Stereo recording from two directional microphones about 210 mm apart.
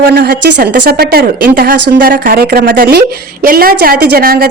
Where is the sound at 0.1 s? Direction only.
50° right (ahead or behind).